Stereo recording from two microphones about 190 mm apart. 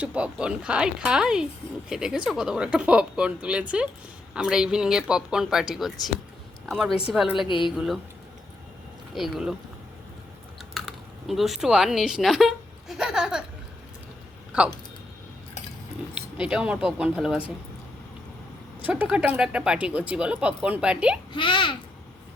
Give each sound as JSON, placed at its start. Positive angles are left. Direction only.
{"t": 0.0, "sound": "speech", "side_deg": -5}
{"t": 7.4, "sound": "a child's voice", "side_deg": 25}
{"t": 9.1, "sound": "speech", "side_deg": 0}
{"t": 10.8, "sound": "speech", "side_deg": 0}
{"t": 16.1, "sound": "speech", "side_deg": -5}
{"t": 18.8, "sound": "speech", "side_deg": -10}
{"t": 21.3, "sound": "a child's voice", "side_deg": 25}